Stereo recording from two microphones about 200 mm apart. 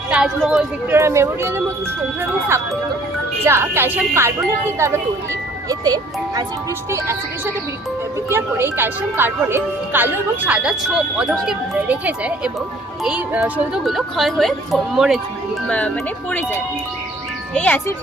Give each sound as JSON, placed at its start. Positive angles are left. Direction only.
{"t": 0.1, "sound": "speech", "side_deg": -5}
{"t": 3.4, "sound": "speech", "side_deg": -10}
{"t": 17.5, "sound": "speech", "side_deg": 10}